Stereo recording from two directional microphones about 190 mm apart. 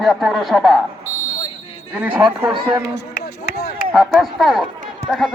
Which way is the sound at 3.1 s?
55° left (ahead or behind).